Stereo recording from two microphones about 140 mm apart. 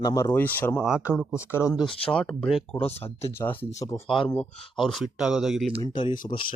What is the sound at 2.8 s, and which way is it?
Speech, 45° left (ahead or behind).